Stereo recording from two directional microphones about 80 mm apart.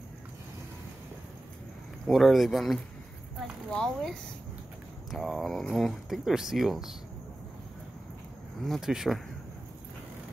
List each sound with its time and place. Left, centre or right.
2.0 s speech: centre
8.6 s speech: centre